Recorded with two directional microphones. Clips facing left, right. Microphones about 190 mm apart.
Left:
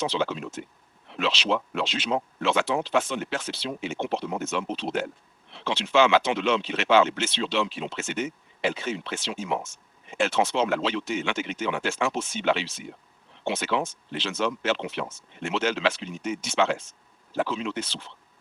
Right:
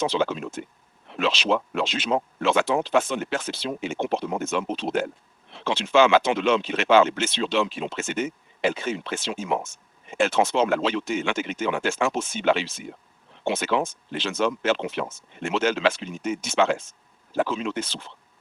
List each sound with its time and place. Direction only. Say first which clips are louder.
0.0 s speech: right 3 dB; 50° right (ahead or behind)